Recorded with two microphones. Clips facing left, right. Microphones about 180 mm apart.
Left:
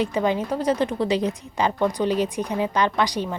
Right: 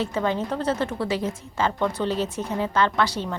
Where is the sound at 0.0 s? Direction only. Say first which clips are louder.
Left 2 dB; 15° left (ahead or behind).